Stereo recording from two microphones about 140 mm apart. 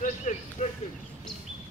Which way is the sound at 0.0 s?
60° left (ahead or behind).